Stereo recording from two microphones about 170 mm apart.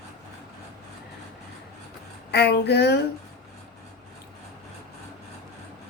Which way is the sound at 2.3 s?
75° left (ahead or behind).